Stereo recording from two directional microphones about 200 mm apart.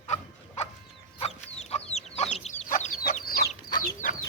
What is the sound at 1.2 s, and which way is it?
Chicken, 30° left (ahead or behind).